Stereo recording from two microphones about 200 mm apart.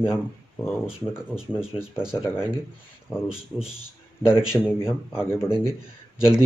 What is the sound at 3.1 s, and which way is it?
A man's voice, centre (ahead or behind).